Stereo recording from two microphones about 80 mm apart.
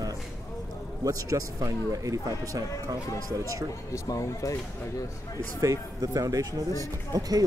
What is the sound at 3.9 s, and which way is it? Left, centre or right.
Speech, left.